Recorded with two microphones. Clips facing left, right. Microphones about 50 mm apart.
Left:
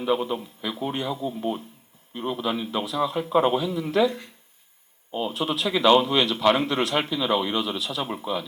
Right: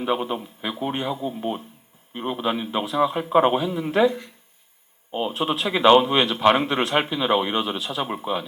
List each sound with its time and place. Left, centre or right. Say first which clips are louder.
0.0 s a man's voice: even; right